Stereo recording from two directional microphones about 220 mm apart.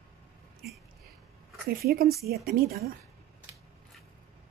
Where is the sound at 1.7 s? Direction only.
40° right (ahead or behind).